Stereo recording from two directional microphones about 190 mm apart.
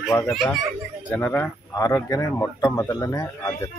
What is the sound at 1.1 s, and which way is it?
Speech, 10° left (ahead or behind).